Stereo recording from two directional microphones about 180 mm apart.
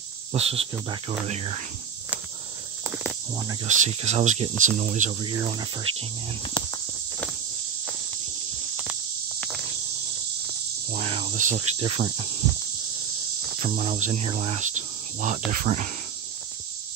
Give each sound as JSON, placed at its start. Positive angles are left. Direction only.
{"t": 0.3, "sound": "cricket", "side_deg": -35}
{"t": 3.6, "sound": "speech", "side_deg": -40}
{"t": 5.2, "sound": "cricket", "side_deg": -25}
{"t": 11.0, "sound": "cricket", "side_deg": -35}
{"t": 13.6, "sound": "speech", "side_deg": -40}